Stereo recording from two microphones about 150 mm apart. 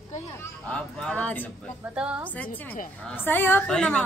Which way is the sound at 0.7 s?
5° left (ahead or behind).